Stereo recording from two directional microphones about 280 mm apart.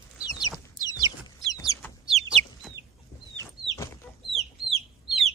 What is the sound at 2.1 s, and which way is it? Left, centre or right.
Chicken, right.